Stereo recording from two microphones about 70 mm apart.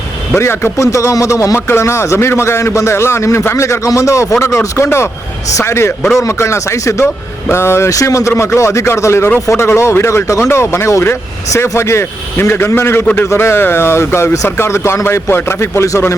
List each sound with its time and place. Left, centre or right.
0.3 s a man's voice: left
7.9 s a man's voice: left